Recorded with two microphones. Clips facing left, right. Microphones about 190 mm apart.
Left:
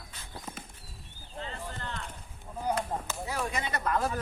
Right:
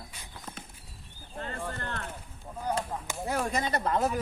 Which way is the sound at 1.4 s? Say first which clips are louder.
Right 3 dB; 55° right (ahead or behind).